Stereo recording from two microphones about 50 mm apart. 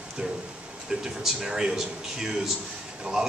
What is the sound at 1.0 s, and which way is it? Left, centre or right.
A man's voice, centre.